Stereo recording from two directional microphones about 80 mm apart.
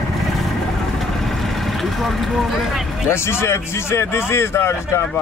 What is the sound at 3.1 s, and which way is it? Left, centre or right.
Speech, left.